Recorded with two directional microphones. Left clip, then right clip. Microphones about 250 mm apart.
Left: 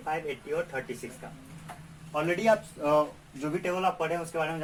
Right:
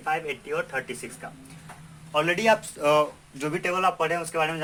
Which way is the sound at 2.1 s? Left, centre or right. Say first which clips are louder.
Right 4 dB; right.